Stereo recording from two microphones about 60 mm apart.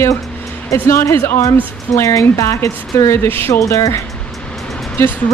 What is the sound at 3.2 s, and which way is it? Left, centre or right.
Speech, left.